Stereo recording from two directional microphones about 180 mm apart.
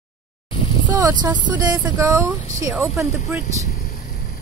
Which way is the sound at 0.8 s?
20° right (ahead or behind).